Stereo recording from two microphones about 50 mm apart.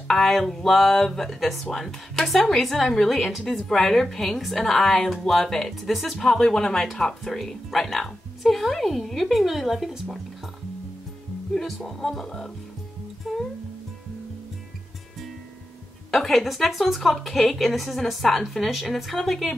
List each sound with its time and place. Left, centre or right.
0.1 s speech: centre
11.5 s speech: centre
13.2 s music: centre
16.1 s speech: centre